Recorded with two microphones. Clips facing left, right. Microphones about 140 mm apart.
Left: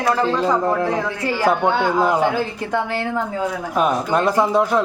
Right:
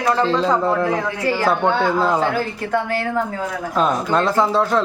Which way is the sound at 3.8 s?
15° left (ahead or behind).